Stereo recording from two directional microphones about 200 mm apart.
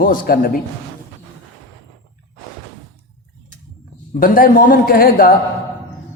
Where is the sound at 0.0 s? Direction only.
45° left (ahead or behind).